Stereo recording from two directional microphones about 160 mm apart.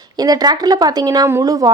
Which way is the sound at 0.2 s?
25° right (ahead or behind).